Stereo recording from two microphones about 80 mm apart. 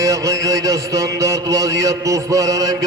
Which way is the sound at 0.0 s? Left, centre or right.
Right.